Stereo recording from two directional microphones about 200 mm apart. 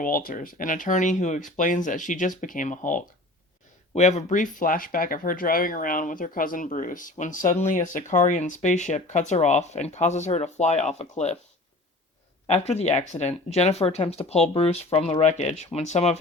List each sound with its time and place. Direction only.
0.0 s speech: 45° left (ahead or behind)
12.5 s speech: 30° left (ahead or behind)